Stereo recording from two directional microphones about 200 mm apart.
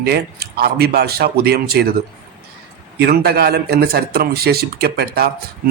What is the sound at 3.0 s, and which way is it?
Speech, 55° right (ahead or behind).